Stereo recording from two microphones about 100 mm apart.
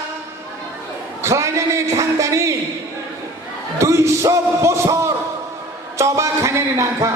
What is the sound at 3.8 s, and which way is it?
Music, 30° right (ahead or behind).